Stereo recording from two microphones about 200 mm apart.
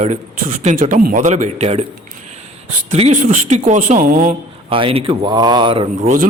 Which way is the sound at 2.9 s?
35° right (ahead or behind).